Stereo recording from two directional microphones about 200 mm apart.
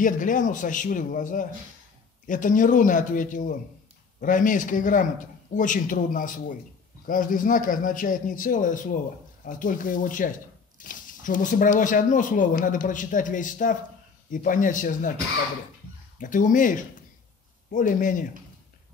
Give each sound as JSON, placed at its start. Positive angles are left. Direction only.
{"t": 0.0, "sound": "speech", "side_deg": 40}
{"t": 16.2, "sound": "speech", "side_deg": 40}